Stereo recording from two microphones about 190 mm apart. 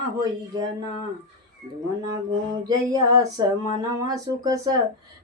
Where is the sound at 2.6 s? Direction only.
20° right (ahead or behind).